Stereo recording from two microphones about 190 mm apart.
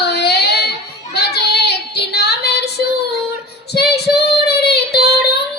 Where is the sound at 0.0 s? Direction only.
60° left (ahead or behind).